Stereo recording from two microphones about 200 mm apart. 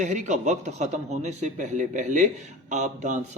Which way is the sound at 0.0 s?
35° right (ahead or behind).